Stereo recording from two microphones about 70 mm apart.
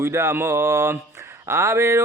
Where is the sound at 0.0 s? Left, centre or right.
Right.